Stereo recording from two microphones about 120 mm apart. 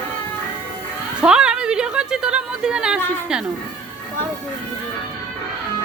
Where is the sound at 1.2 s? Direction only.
5° right (ahead or behind).